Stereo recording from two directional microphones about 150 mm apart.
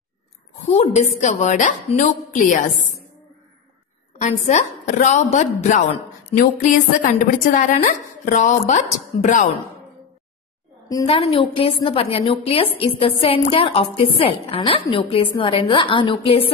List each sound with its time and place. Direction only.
0.6 s a woman's voice: 50° left (ahead or behind)
4.2 s a woman's voice: 50° left (ahead or behind)
11.1 s a woman's voice: 40° left (ahead or behind)